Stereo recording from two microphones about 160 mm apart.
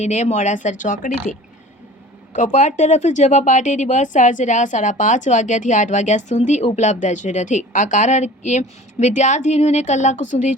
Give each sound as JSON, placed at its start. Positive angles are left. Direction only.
{"t": 0.0, "sound": "a woman's voice", "side_deg": 45}
{"t": 2.3, "sound": "a woman's voice", "side_deg": 50}